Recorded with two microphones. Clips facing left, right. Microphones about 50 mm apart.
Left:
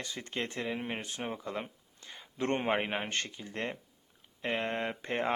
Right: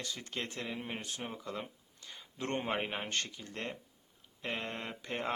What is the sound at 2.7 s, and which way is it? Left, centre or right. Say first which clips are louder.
Speech: left 4 dB; left.